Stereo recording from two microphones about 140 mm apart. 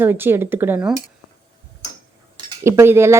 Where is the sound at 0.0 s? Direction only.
15° right (ahead or behind).